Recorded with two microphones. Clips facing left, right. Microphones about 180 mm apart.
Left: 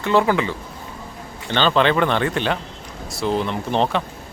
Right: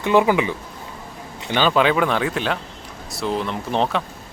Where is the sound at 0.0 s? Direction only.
15° right (ahead or behind).